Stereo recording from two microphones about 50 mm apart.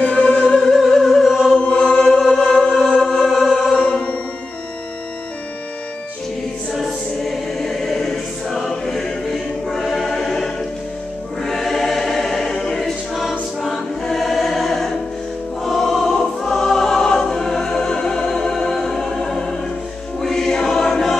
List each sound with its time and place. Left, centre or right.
0.0 s music: left
0.6 s music: centre
1.7 s choir: centre
2.0 s choir: centre
2.4 s music: centre
3.2 s music: centre
3.8 s music: left
6.7 s choir: centre